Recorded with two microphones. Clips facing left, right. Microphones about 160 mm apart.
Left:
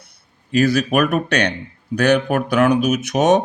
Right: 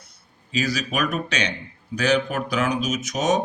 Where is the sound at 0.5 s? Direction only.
60° left (ahead or behind).